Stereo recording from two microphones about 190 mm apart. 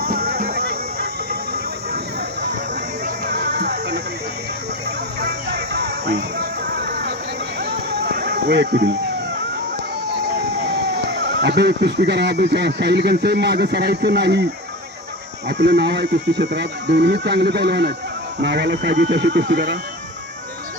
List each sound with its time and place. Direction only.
0.0 s music: 55° right (ahead or behind)
3.2 s music: 60° right (ahead or behind)
5.2 s music: 60° right (ahead or behind)
8.1 s a sound: 60° right (ahead or behind)
10.2 s speech: 60° right (ahead or behind)
15.4 s speech: 60° right (ahead or behind)